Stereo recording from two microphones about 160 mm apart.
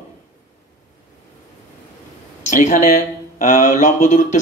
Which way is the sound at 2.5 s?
50° left (ahead or behind).